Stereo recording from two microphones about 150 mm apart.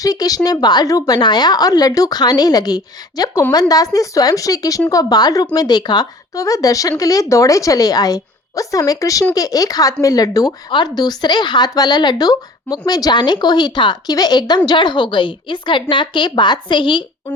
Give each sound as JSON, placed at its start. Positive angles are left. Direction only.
{"t": 0.0, "sound": "a woman's voice", "side_deg": 25}